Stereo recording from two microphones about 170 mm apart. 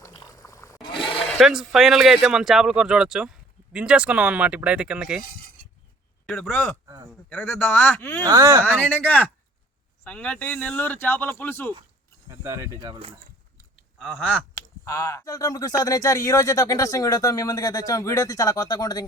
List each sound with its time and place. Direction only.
0.0 s a sound: 20° left (ahead or behind)
1.2 s speech: centre (ahead or behind)
6.2 s speech: 10° left (ahead or behind)
6.8 s a man's voice: 20° right (ahead or behind)
7.3 s speech: 10° left (ahead or behind)
8.3 s speech: 20° right (ahead or behind)
8.8 s speech: 10° left (ahead or behind)
12.3 s speech: 20° right (ahead or behind)
14.5 s speech: 20° left (ahead or behind)